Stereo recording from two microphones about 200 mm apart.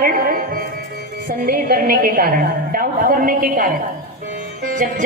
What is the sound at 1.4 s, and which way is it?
A woman's voice, 45° right (ahead or behind).